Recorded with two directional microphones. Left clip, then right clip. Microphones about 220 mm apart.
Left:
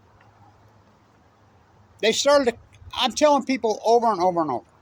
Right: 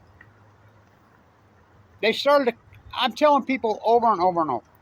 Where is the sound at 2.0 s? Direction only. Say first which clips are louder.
Left 1 dB; 15° left (ahead or behind).